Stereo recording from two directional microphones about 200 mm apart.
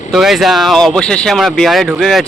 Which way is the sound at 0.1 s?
Centre (ahead or behind).